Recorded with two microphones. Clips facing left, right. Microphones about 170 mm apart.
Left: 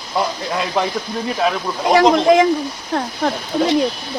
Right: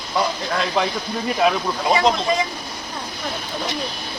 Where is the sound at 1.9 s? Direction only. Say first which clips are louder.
Left 8 dB; 75° left (ahead or behind).